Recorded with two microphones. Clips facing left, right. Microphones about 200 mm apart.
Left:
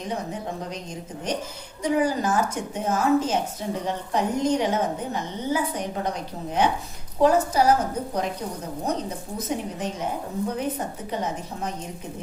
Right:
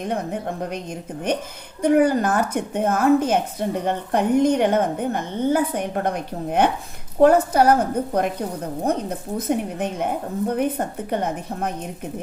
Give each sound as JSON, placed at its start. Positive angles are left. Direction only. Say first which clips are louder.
{"t": 0.0, "sound": "a woman's voice", "louder": "right 5 dB", "side_deg": -55}
{"t": 1.8, "sound": "a woman's voice", "louder": "right 6 dB", "side_deg": -60}